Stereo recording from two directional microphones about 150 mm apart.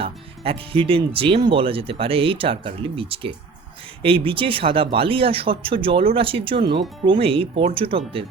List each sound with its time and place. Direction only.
0.0 s speech: 40° right (ahead or behind)